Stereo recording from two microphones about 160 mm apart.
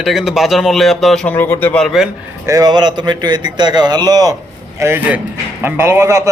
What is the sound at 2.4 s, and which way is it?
A man's voice, 20° right (ahead or behind).